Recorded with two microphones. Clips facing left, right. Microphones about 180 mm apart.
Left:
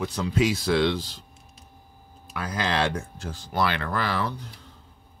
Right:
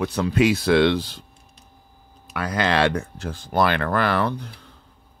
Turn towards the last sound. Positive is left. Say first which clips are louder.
# right 6 dB
turn(degrees=-60)  # may be behind; listen again after turning